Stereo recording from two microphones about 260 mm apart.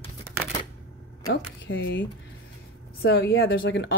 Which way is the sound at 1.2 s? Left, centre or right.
Left.